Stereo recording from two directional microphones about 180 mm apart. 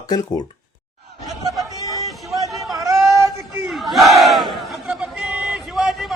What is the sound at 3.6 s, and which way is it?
Battle cry, centre (ahead or behind).